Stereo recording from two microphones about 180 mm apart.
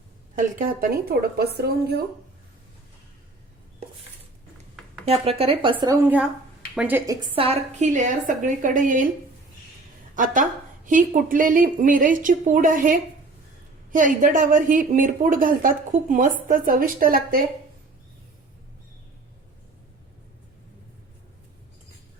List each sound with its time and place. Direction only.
0.3 s speech: 55° right (ahead or behind)
5.0 s speech: 35° right (ahead or behind)
6.7 s a woman's voice: 10° right (ahead or behind)
7.3 s speech: 35° right (ahead or behind)
10.2 s speech: 45° right (ahead or behind)